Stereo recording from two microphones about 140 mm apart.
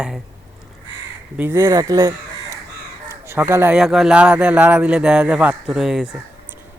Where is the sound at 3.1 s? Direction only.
20° right (ahead or behind).